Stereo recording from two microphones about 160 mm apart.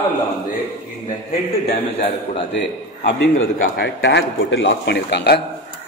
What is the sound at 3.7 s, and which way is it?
Speech, 90° left.